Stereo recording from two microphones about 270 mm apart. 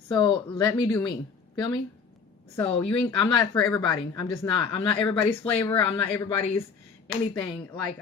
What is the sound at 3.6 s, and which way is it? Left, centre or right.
A woman's voice, centre.